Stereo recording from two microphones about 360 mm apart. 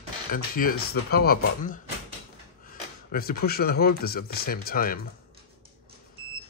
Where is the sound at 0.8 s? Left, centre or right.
Left.